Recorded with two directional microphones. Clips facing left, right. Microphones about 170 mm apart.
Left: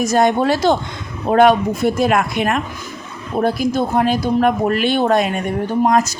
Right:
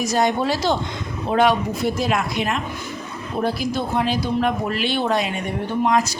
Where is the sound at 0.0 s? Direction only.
50° left (ahead or behind).